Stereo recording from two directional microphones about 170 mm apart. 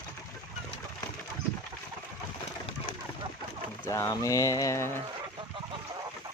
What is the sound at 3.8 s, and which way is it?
Speech, 15° left (ahead or behind).